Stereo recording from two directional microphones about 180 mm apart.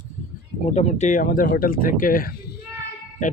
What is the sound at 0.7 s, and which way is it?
Speech, 40° left (ahead or behind).